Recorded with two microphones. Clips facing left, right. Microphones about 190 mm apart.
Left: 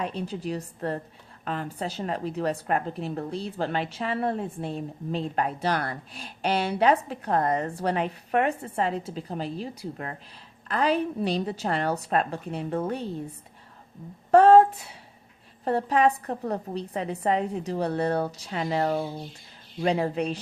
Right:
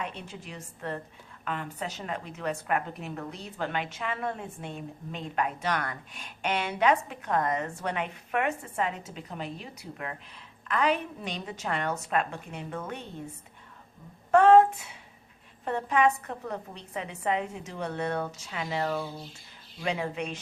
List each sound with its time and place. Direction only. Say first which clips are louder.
0.0 s a woman's voice: left 8 dB; 35° left (ahead or behind)
14.3 s a sound: left 3 dB; 35° left (ahead or behind)
15.6 s a woman's voice: left 3 dB; 35° left (ahead or behind)